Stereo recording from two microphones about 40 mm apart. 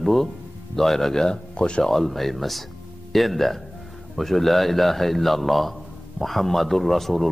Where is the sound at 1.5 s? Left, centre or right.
Left.